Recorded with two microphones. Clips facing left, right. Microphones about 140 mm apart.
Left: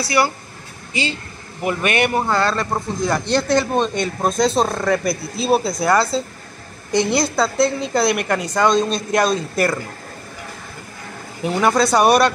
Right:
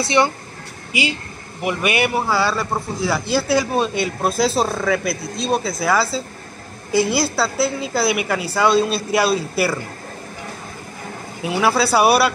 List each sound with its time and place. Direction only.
0.0 s speech: 20° right (ahead or behind)
0.9 s a man's voice: 10° right (ahead or behind)
11.4 s speech: 5° right (ahead or behind)